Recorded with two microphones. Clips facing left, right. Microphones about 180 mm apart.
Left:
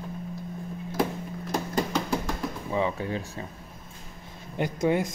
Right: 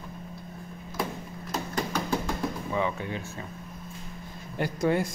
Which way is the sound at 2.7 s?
30° left (ahead or behind).